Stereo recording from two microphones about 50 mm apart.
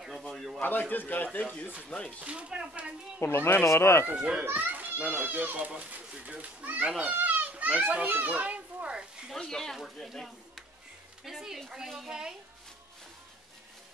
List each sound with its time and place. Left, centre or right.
0.6 s a man's voice: left
2.1 s speech: right
3.2 s speech: left
3.6 s speech: left
4.1 s speech: right
4.5 s children playing: right
5.1 s speech: right
7.1 s children playing: right
9.4 s speech: centre